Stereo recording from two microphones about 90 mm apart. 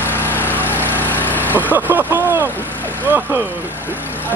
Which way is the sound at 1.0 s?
20° left (ahead or behind).